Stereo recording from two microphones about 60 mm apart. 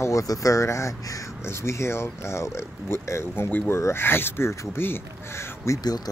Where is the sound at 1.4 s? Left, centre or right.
Left.